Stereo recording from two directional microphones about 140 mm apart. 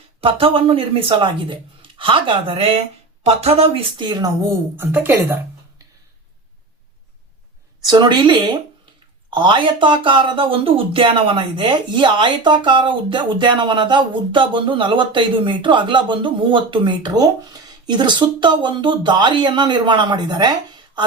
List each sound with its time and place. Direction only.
0.2 s speech: 40° right (ahead or behind)
4.8 s a woman's voice: 15° right (ahead or behind)
7.9 s speech: 30° right (ahead or behind)